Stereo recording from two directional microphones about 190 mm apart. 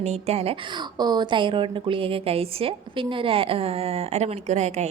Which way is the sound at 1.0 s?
20° right (ahead or behind).